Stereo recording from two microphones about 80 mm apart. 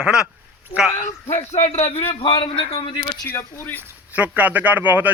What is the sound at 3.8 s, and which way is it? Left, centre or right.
Speech, centre.